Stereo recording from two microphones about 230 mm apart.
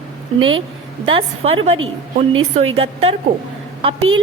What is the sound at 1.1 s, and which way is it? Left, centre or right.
Speech, right.